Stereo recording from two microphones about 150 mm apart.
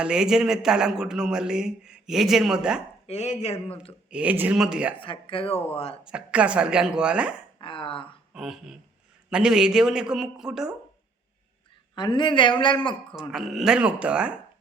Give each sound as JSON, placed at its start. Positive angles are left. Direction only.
{"t": 0.0, "sound": "a man's voice", "side_deg": -5}
{"t": 3.1, "sound": "speech", "side_deg": 45}
{"t": 4.1, "sound": "speech", "side_deg": -10}
{"t": 4.9, "sound": "speech", "side_deg": 35}
{"t": 6.1, "sound": "speech", "side_deg": -5}
{"t": 7.6, "sound": "speech", "side_deg": 35}
{"t": 8.3, "sound": "a man's voice", "side_deg": 0}
{"t": 11.9, "sound": "speech", "side_deg": 30}
{"t": 13.1, "sound": "a man's voice", "side_deg": 0}